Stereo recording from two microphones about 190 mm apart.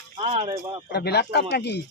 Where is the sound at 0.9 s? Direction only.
60° left (ahead or behind).